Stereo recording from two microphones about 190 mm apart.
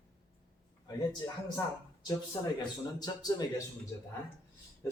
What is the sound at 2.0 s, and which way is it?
Speech, 20° left (ahead or behind).